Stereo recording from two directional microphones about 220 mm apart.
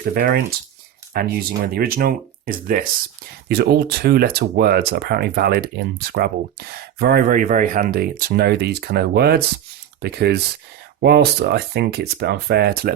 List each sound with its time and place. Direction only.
0.0 s speech: 45° right (ahead or behind)